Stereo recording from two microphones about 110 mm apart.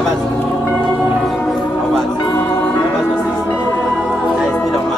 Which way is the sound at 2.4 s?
20° left (ahead or behind).